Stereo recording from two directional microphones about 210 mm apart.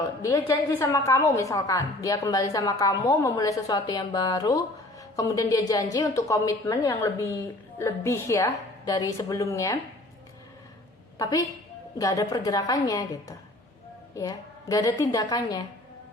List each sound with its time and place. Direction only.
0.2 s a woman's voice: 15° left (ahead or behind)
11.2 s a woman's voice: 15° left (ahead or behind)